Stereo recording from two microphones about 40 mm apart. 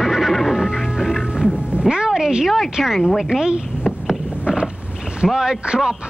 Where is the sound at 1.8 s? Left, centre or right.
Right.